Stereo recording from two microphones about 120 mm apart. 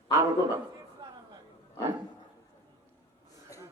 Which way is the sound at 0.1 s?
20° right (ahead or behind).